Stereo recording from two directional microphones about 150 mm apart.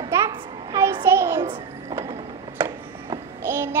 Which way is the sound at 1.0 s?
15° right (ahead or behind).